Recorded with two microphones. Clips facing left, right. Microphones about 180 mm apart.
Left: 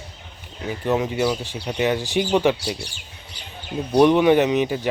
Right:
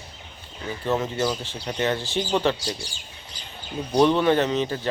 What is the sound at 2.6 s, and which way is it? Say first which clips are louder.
Speech: left 3 dB; 65° left (ahead or behind).